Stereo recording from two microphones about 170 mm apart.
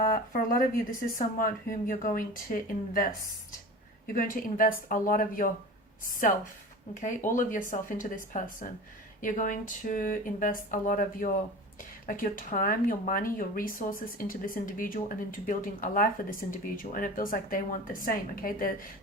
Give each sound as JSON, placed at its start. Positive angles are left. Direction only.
{"t": 0.0, "sound": "speech", "side_deg": 55}
{"t": 4.1, "sound": "speech", "side_deg": 55}
{"t": 7.0, "sound": "speech", "side_deg": 50}